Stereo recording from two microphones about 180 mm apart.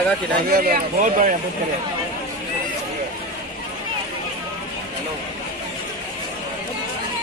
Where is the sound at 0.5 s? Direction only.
55° right (ahead or behind).